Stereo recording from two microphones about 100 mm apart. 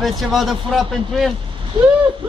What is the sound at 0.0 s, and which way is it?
A man's voice, centre (ahead or behind).